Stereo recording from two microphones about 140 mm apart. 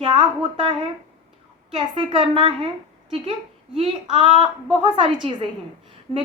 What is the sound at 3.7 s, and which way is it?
A woman's voice, 35° right (ahead or behind).